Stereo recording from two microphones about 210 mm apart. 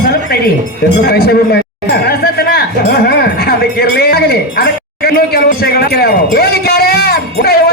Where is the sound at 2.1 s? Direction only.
50° left (ahead or behind).